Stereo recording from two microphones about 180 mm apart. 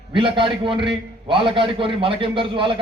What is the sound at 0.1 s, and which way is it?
A man's voice, 25° right (ahead or behind).